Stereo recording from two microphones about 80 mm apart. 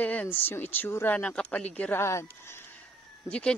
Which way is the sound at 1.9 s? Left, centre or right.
Left.